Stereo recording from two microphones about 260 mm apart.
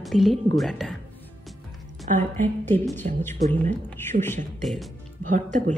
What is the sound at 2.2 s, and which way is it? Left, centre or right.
A woman's voice, centre.